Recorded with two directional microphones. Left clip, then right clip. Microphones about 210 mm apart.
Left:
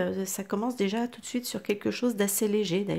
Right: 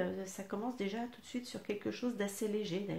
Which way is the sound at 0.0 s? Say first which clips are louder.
Left 8 dB; 45° left (ahead or behind).